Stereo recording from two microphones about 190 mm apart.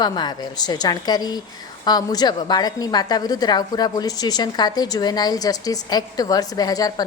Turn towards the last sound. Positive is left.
turn(degrees=20)  # may be behind; listen again after turning